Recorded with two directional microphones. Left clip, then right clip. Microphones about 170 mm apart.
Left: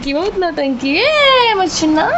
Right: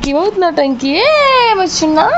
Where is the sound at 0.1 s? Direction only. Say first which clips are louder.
Right 4 dB; 45° right (ahead or behind).